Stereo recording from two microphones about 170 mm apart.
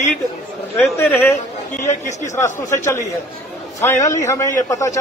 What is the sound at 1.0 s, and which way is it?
Speech, 15° left (ahead or behind).